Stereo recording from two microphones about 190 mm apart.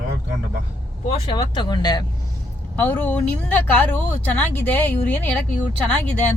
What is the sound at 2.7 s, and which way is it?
Speech, 10° left (ahead or behind).